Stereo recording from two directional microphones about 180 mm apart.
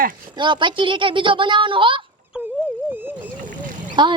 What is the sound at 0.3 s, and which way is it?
A woman's voice, 25° right (ahead or behind).